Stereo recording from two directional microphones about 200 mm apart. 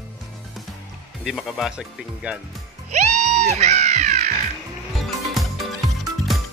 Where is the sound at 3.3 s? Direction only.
35° right (ahead or behind).